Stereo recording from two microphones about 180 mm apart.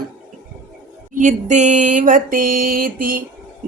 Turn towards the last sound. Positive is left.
turn(degrees=-50)  # may be behind; listen again after turning